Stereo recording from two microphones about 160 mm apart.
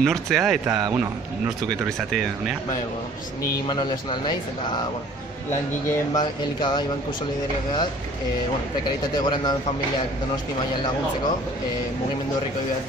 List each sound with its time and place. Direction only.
0.0 s speech: centre (ahead or behind)
0.7 s speech: 20° right (ahead or behind)
3.6 s speech: 30° left (ahead or behind)
5.9 s speech: 25° left (ahead or behind)
9.1 s speech: 25° left (ahead or behind)